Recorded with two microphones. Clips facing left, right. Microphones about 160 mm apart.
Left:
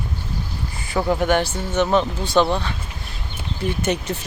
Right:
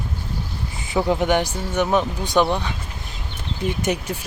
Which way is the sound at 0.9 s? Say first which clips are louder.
Even; 15° right (ahead or behind).